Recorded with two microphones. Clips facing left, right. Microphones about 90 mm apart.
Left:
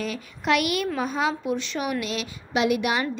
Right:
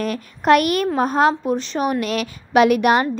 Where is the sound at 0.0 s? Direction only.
50° right (ahead or behind).